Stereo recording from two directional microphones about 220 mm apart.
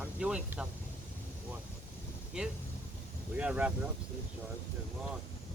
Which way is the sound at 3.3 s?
5° right (ahead or behind).